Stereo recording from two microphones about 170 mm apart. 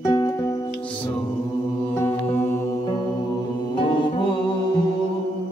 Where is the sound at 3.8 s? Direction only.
30° left (ahead or behind).